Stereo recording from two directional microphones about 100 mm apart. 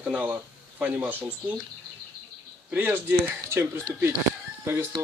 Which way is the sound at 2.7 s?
20° right (ahead or behind).